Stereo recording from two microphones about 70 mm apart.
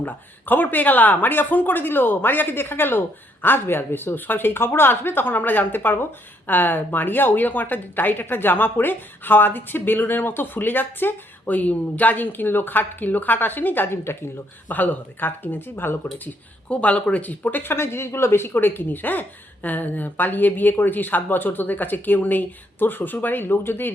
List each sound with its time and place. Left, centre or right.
0.0 s speech: left